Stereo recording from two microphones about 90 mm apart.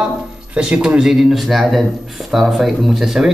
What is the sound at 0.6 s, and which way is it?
Speech, 10° right (ahead or behind).